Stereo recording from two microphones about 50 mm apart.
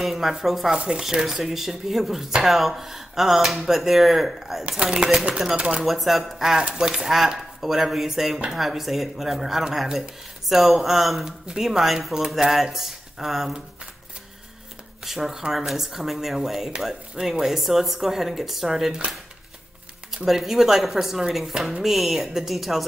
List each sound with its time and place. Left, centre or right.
0.0 s speech: centre
4.6 s speech: centre
5.6 s speech: right
5.9 s speech: centre
15.0 s speech: centre
20.2 s speech: centre